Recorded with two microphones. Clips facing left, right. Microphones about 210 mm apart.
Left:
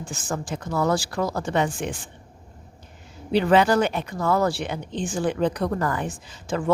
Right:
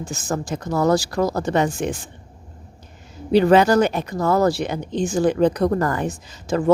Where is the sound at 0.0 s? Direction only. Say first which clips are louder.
Right 4 dB; 40° right (ahead or behind).